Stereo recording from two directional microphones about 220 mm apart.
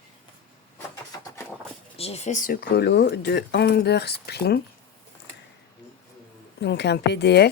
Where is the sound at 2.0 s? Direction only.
30° left (ahead or behind); by 4.6 s 45° left (ahead or behind).